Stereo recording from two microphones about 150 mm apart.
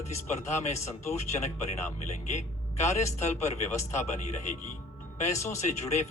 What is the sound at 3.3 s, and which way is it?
Speech, 50° left (ahead or behind).